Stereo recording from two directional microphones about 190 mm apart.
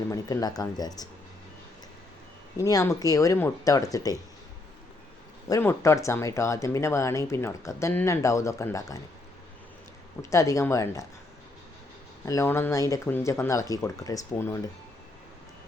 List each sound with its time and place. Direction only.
0.1 s speech: 20° left (ahead or behind)
2.6 s speech: 15° left (ahead or behind)
5.5 s speech: 15° left (ahead or behind)
10.2 s speech: 15° left (ahead or behind)
12.2 s speech: 15° left (ahead or behind)